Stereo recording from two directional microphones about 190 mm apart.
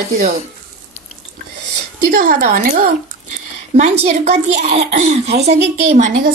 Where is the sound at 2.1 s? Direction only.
45° right (ahead or behind).